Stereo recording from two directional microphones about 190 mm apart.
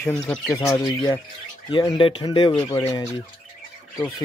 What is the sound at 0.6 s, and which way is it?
Speech, 15° left (ahead or behind).